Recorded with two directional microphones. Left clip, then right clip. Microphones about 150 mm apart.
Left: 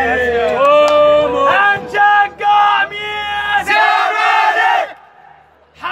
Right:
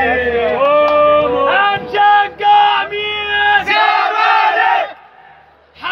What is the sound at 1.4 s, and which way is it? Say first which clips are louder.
Music: left 1 dB; 30° left (ahead or behind).